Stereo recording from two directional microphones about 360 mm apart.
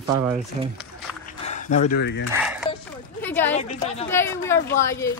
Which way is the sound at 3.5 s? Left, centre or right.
Centre.